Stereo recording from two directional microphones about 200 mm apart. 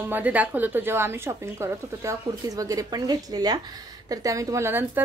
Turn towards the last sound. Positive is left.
turn(degrees=-10)  # may be behind; listen again after turning